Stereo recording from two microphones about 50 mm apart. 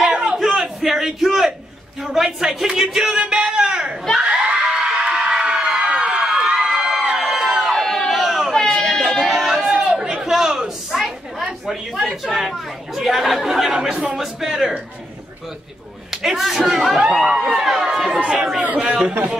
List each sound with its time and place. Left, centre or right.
0.0 s a sound: centre
2.0 s speech: centre
3.1 s a sound: centre
4.2 s crowd: right; by 7.5 s centre
7.7 s a sound: centre
12.2 s speech: centre
13.9 s a man's voice: right
14.2 s speech: centre
16.1 s a man's voice: centre
18.2 s a man's voice: right